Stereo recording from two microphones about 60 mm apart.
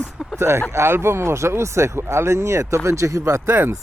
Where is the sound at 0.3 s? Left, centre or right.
Right.